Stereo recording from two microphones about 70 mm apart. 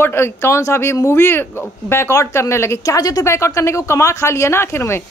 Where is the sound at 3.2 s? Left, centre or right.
Left.